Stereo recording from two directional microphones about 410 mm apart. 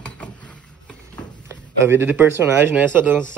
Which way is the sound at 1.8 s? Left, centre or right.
Centre.